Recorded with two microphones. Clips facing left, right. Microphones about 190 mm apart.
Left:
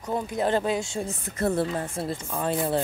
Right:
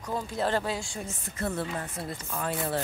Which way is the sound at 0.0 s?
20° left (ahead or behind).